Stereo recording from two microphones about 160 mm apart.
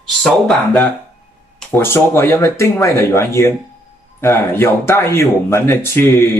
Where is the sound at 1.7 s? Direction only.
15° left (ahead or behind).